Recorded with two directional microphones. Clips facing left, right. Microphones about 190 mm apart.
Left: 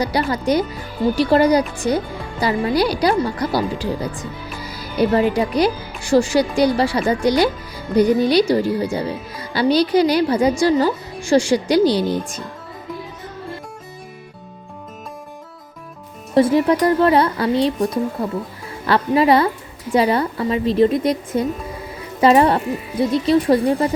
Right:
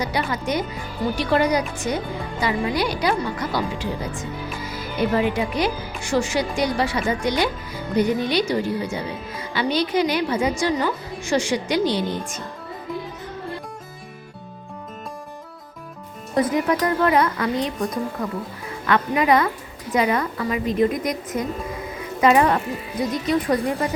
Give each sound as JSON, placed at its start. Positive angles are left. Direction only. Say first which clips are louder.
{"t": 0.0, "sound": "speech", "louder": "left 5 dB", "side_deg": 35}
{"t": 16.3, "sound": "speech", "louder": "left 6 dB", "side_deg": 30}